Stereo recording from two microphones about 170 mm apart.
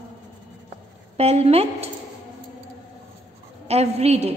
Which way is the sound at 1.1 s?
35° right (ahead or behind).